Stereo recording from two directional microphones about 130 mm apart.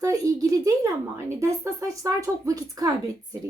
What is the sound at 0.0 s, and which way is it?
Speech, 25° right (ahead or behind).